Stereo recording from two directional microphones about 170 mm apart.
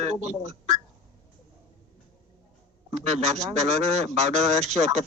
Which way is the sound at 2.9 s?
40° right (ahead or behind).